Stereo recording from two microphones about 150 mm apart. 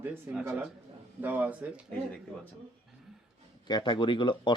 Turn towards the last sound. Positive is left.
turn(degrees=30)  # may be behind; listen again after turning